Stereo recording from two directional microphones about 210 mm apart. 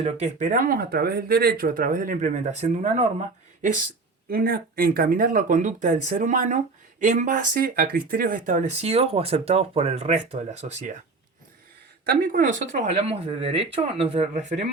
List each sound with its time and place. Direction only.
0.0 s speech: 35° right (ahead or behind)
4.3 s speech: 45° right (ahead or behind)
12.0 s speech: 45° right (ahead or behind); by 14.4 s 30° right (ahead or behind)